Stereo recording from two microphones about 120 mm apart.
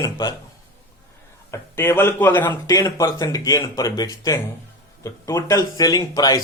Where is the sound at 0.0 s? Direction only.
30° left (ahead or behind).